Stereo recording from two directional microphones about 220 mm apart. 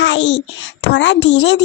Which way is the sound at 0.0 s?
55° left (ahead or behind).